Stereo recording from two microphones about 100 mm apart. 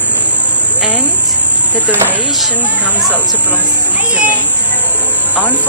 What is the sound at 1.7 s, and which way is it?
Speech, 20° right (ahead or behind).